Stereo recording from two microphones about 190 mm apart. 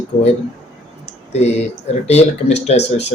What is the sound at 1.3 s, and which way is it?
Speech, 35° left (ahead or behind).